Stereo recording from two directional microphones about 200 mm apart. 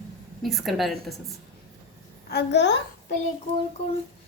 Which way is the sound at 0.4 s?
Centre (ahead or behind).